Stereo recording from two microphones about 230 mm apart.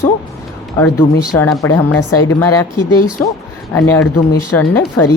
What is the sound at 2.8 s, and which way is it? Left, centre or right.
Speech, left.